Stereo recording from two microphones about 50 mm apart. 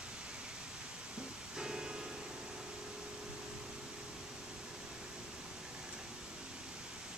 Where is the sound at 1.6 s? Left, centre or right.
Centre.